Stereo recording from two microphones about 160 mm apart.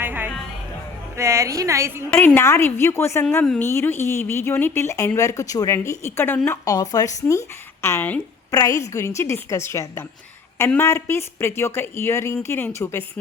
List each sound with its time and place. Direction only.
0.0 s music: 10° right (ahead or behind)
1.1 s a woman's voice: 20° right (ahead or behind)
2.1 s speech: 15° left (ahead or behind)
3.2 s a woman's voice: 5° left (ahead or behind)